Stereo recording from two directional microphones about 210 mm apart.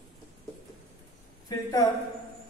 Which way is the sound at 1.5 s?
15° left (ahead or behind).